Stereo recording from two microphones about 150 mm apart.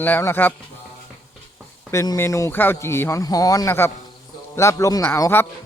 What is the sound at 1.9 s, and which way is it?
Speech, 20° left (ahead or behind).